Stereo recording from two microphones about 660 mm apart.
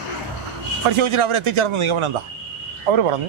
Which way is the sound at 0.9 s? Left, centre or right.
Right.